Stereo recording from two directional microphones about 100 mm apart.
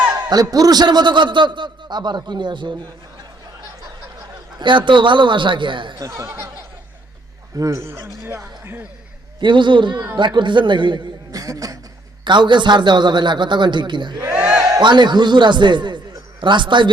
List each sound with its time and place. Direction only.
0.1 s a man's voice: 40° right (ahead or behind)
4.9 s a man's voice: 55° right (ahead or behind)
6.0 s speech: 30° right (ahead or behind)
7.5 s speech: 35° right (ahead or behind)
9.4 s a man's voice: 55° right (ahead or behind)
11.3 s speech: 35° right (ahead or behind)
12.2 s a man's voice: 50° right (ahead or behind)
14.3 s battle cry: 10° right (ahead or behind)
14.8 s a man's voice: 50° right (ahead or behind)